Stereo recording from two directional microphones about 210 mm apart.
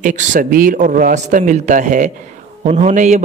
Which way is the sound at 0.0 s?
35° right (ahead or behind).